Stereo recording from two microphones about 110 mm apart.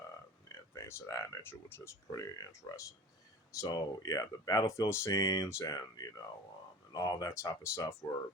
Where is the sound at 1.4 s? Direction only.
20° left (ahead or behind).